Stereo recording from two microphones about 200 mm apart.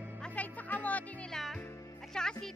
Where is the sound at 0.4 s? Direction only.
10° left (ahead or behind).